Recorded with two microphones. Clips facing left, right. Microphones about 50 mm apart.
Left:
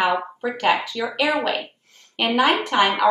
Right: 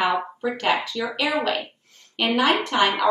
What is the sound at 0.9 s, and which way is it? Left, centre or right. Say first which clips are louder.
Speech: left 3 dB; centre.